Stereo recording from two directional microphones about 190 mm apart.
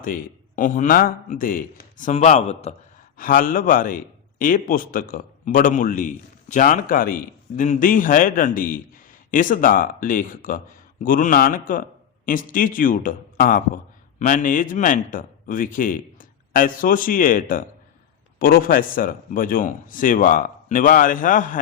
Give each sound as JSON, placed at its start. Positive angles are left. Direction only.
{"t": 0.0, "sound": "a man's voice", "side_deg": 45}
{"t": 3.2, "sound": "a man's voice", "side_deg": 45}